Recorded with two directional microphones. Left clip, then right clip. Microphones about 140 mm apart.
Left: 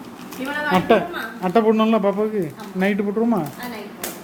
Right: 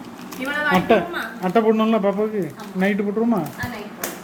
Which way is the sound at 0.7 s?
15° left (ahead or behind).